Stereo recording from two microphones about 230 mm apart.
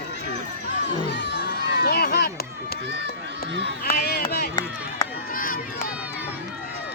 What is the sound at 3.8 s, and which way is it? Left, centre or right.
Run, left.